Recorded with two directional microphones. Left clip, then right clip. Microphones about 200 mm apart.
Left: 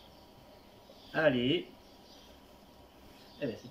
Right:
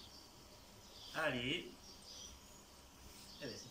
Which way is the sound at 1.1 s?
45° left (ahead or behind).